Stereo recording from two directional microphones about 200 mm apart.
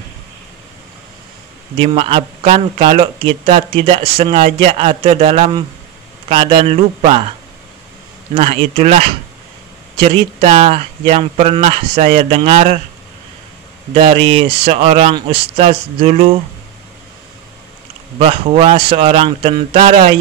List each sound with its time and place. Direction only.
1.8 s a man's voice: 25° right (ahead or behind)
8.4 s a man's voice: 30° right (ahead or behind)
13.9 s a man's voice: 25° right (ahead or behind)
18.2 s a man's voice: 30° right (ahead or behind)